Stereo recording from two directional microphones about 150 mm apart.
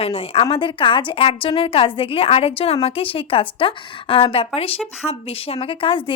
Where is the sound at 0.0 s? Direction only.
40° left (ahead or behind).